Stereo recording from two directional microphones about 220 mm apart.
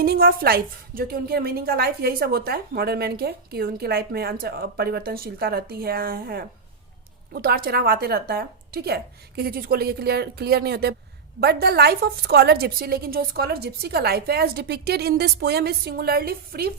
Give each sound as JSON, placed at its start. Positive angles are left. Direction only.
{"t": 0.0, "sound": "a woman's voice", "side_deg": -45}